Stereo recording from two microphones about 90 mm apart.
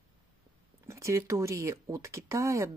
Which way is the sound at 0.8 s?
30° right (ahead or behind).